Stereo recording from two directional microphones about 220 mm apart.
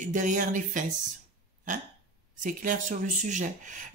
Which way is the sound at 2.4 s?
35° right (ahead or behind).